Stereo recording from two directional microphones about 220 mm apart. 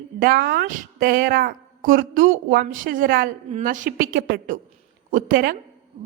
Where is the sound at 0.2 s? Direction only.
45° right (ahead or behind).